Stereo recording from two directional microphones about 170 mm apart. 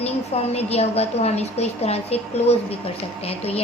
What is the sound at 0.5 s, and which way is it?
A woman's voice, 35° left (ahead or behind).